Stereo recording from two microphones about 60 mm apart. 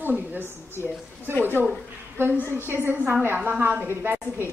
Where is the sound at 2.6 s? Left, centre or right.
Right.